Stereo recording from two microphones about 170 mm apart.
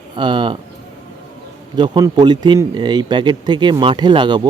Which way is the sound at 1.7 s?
25° right (ahead or behind).